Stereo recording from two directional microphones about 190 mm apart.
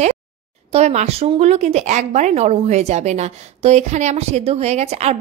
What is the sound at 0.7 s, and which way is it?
A woman's voice, 35° right (ahead or behind).